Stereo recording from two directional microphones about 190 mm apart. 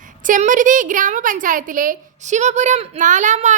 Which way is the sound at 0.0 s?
45° right (ahead or behind).